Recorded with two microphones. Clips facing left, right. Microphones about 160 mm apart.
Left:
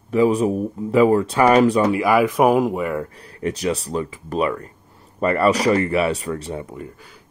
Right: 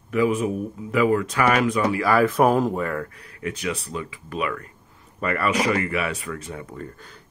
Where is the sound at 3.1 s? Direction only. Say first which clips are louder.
Left 6 dB; 35° left (ahead or behind).